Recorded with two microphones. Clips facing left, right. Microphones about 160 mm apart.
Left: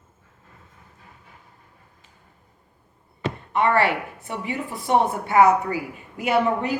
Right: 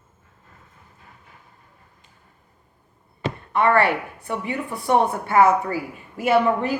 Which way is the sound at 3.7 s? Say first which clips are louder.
Right 2 dB; 20° left (ahead or behind).